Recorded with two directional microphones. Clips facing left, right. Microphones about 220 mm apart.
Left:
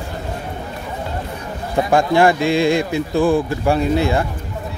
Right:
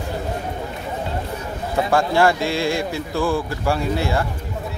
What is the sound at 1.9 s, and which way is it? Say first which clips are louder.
Speech: left 3 dB; 15° left (ahead or behind).